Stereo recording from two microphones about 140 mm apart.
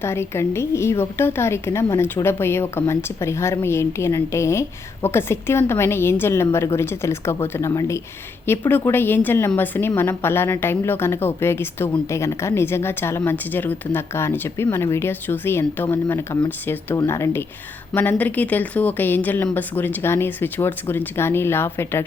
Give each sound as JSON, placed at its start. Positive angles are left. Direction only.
{"t": 0.0, "sound": "a woman's voice", "side_deg": 20}